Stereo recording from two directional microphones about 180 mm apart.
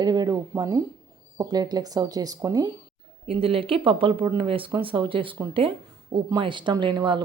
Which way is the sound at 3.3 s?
30° right (ahead or behind).